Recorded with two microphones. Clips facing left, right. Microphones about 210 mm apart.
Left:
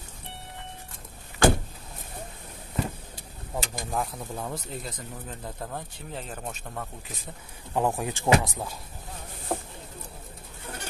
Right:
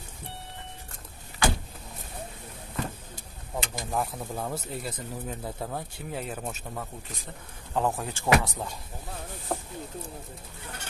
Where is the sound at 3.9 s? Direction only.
5° right (ahead or behind).